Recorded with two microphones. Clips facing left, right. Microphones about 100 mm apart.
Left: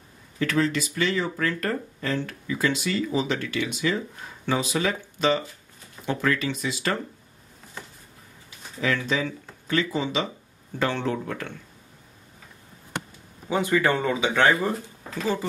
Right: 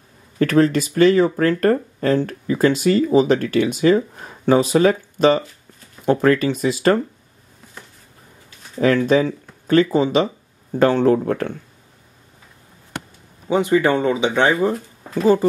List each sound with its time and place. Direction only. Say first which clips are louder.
0.4 s speech: right 8 dB; 50° right (ahead or behind)
8.7 s speech: right 10 dB; 45° right (ahead or behind)
13.5 s speech: right 6 dB; 20° right (ahead or behind)
14.5 s speech: right 5 dB; 5° right (ahead or behind)